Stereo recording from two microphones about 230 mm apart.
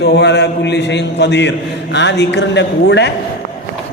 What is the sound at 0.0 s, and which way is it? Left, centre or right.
A man's voice, left.